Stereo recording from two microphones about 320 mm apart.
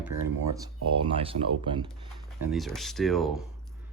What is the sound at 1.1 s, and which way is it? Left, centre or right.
Speech, centre.